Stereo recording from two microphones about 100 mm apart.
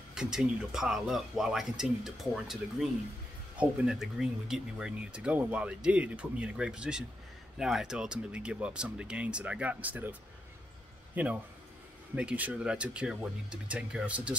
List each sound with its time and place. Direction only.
0.1 s speech: 5° right (ahead or behind)
11.2 s speech: 15° right (ahead or behind)